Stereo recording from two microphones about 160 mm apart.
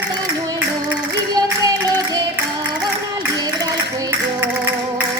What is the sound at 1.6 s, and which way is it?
Music, 20° right (ahead or behind).